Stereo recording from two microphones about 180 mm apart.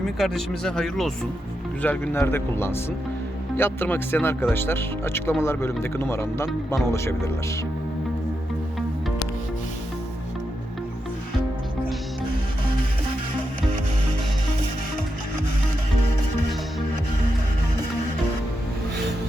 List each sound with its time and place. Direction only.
0.0 s speech: centre (ahead or behind)